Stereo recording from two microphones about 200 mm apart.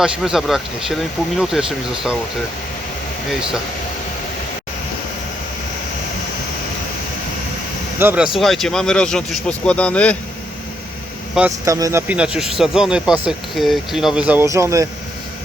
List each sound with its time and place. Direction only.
0.0 s speech: centre (ahead or behind)
7.9 s speech: 10° right (ahead or behind)
11.3 s speech: 10° right (ahead or behind)